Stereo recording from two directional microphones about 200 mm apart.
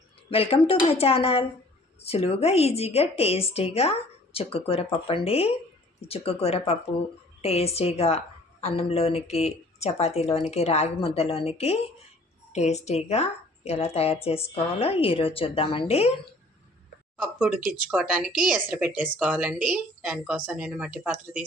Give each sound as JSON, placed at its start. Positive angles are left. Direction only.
{"t": 0.3, "sound": "speech", "side_deg": 30}
{"t": 17.2, "sound": "a woman's voice", "side_deg": -5}